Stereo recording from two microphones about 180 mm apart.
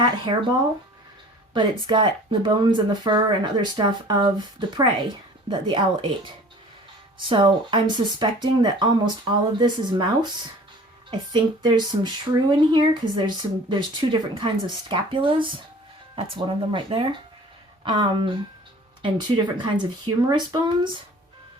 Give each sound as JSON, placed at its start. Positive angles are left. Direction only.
{"t": 1.9, "sound": "speech", "side_deg": -25}